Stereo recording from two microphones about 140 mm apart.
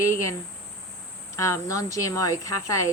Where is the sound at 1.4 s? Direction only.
20° left (ahead or behind).